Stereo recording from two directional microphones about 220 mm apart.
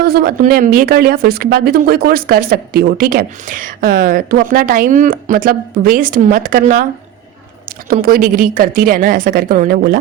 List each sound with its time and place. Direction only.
0.0 s speech: 45° right (ahead or behind)
7.9 s speech: 40° right (ahead or behind)